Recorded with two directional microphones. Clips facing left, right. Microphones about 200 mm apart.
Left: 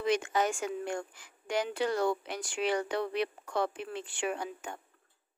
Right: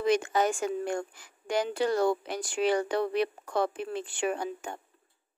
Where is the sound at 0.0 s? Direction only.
40° right (ahead or behind).